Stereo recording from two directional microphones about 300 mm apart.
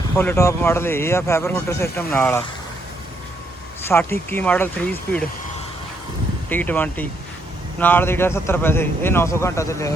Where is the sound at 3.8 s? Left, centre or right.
Centre.